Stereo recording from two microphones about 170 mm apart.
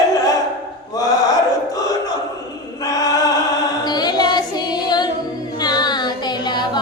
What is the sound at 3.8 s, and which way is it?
Female singing, 25° left (ahead or behind).